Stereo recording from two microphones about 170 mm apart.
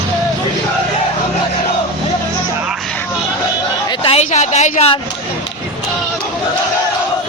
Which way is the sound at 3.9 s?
30° left (ahead or behind).